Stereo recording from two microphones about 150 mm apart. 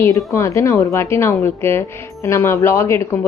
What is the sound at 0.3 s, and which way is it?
Speech, 20° left (ahead or behind).